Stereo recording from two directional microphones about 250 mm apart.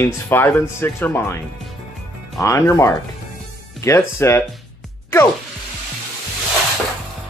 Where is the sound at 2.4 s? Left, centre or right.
Centre.